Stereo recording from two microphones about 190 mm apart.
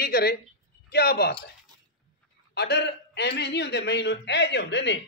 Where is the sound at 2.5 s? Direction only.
60° left (ahead or behind).